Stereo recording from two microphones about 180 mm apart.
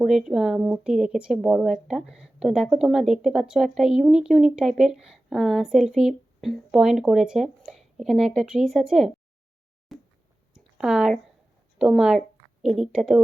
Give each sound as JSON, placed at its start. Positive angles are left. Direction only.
{"t": 0.0, "sound": "speech", "side_deg": 0}
{"t": 9.9, "sound": "a sound", "side_deg": 0}
{"t": 11.8, "sound": "speech", "side_deg": -5}